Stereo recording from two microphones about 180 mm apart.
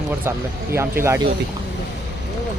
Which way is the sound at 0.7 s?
15° right (ahead or behind).